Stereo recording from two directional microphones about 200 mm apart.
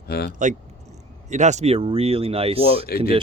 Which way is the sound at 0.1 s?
50° left (ahead or behind).